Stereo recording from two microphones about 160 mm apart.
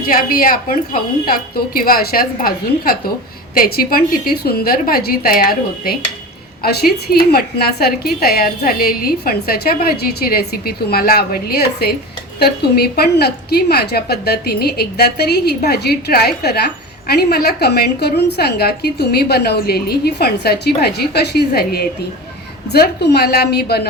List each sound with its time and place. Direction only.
0.1 s a woman's voice: 65° left (ahead or behind)
22.7 s a woman's voice: 90° left